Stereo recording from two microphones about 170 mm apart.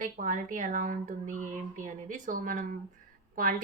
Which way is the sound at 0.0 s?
50° right (ahead or behind).